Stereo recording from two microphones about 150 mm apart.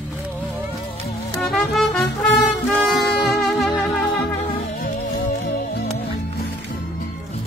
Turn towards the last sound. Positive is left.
turn(degrees=90)